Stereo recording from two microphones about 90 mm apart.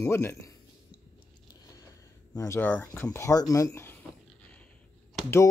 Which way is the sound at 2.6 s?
20° left (ahead or behind).